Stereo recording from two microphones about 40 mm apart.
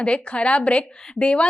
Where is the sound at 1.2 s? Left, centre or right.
Left.